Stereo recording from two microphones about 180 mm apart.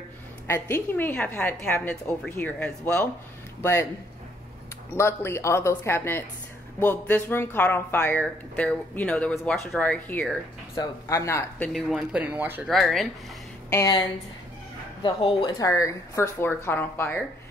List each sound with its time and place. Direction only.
0.5 s speech: 15° left (ahead or behind)
4.9 s speech: 15° left (ahead or behind)
11.7 s speech: centre (ahead or behind)
12.6 s speech: centre (ahead or behind)
13.7 s speech: 15° left (ahead or behind)
15.0 s speech: 25° left (ahead or behind)